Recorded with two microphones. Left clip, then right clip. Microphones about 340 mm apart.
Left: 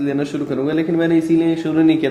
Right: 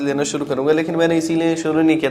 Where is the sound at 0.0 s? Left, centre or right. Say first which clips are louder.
Right 1 dB; right.